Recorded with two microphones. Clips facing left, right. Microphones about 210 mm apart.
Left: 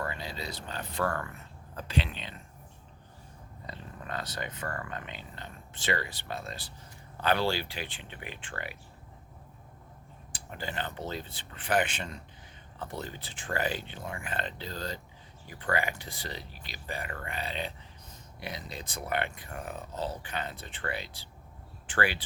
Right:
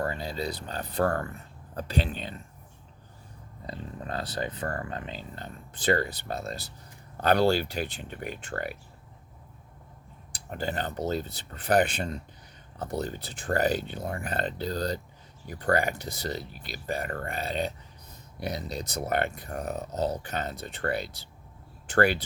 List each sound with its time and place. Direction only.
0.0 s speech: 40° right (ahead or behind)
3.7 s speech: 35° right (ahead or behind)
10.3 s speech: 40° right (ahead or behind)